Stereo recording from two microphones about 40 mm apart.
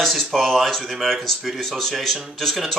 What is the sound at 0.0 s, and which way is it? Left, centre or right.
Speech, centre.